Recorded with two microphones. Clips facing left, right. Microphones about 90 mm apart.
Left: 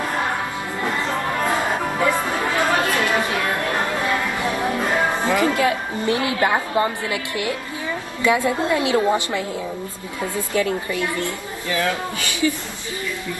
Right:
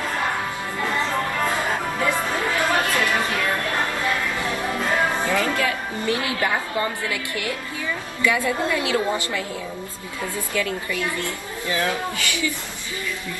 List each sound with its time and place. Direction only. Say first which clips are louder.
0.8 s chatter: even; 20° left (ahead or behind)
4.1 s a woman's voice: left 3 dB; 20° left (ahead or behind)
10.5 s a woman's voice: left 4 dB; 25° left (ahead or behind)